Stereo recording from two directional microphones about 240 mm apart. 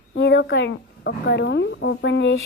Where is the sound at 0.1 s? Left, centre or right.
Left.